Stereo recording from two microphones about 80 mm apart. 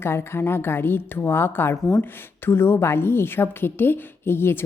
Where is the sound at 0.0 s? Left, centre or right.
Left.